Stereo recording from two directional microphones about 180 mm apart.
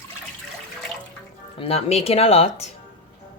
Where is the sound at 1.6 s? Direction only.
35° left (ahead or behind).